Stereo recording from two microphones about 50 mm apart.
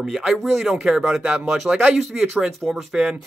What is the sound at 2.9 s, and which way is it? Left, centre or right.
Speech, centre.